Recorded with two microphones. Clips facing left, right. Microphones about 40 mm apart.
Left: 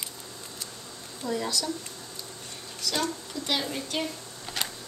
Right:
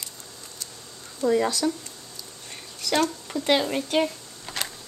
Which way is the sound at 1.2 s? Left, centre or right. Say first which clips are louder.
Right 8 dB; right.